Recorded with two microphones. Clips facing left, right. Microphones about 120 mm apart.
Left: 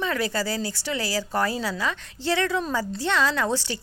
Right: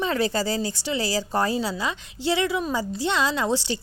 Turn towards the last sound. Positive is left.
turn(degrees=-15)  # may be behind; listen again after turning